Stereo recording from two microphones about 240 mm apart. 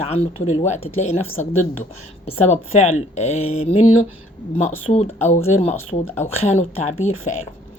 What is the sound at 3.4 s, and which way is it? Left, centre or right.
Mantra, left.